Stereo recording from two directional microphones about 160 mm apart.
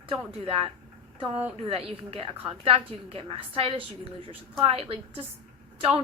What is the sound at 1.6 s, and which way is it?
A woman's voice, 35° right (ahead or behind).